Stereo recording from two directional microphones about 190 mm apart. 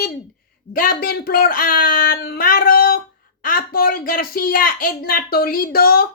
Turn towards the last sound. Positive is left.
turn(degrees=50)  # may be behind; listen again after turning